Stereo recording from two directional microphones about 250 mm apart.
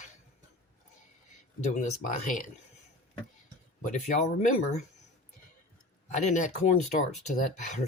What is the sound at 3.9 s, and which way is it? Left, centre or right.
Speech, left.